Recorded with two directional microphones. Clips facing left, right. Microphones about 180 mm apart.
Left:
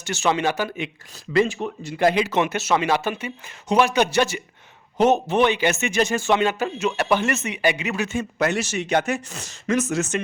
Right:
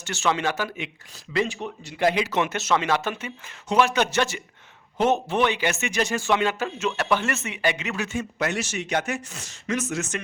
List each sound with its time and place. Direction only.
0.0 s speech: 15° left (ahead or behind)
0.8 s speech: 40° left (ahead or behind)
2.3 s speech: 15° left (ahead or behind)
8.2 s speech: 35° left (ahead or behind)